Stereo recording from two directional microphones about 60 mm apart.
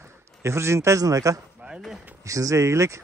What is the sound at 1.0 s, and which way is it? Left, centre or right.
Speech, right.